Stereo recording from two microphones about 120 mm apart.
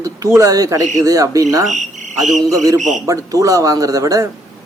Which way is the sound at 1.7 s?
90° right.